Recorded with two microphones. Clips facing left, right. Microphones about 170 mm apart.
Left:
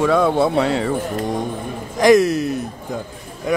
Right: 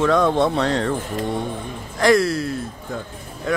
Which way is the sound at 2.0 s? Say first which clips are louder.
Left 4 dB; 20° left (ahead or behind).